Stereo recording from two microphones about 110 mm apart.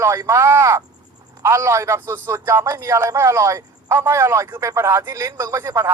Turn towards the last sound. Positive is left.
turn(degrees=-25)  # may be behind; listen again after turning